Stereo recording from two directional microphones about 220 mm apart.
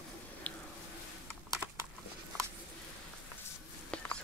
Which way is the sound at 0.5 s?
5° left (ahead or behind).